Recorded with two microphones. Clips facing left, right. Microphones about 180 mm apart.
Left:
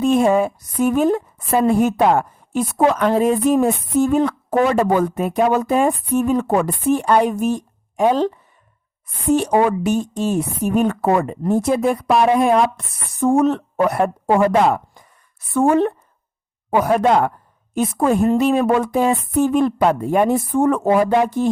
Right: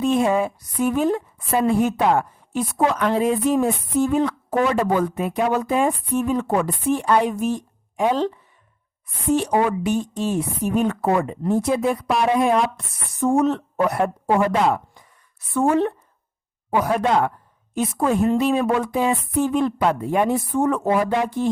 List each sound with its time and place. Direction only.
0.0 s a woman's voice: 45° left (ahead or behind)
9.3 s a woman's voice: 45° left (ahead or behind)